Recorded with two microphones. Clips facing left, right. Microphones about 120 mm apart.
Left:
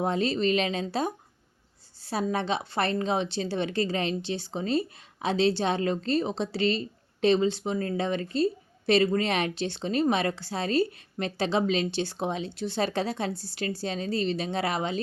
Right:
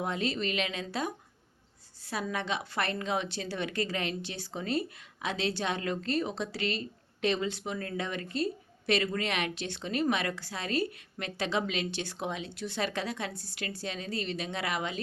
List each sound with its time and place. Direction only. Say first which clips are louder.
0.0 s a woman's voice: left 6 dB; 35° left (ahead or behind)